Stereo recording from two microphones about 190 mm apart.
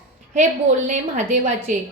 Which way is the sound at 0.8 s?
40° right (ahead or behind).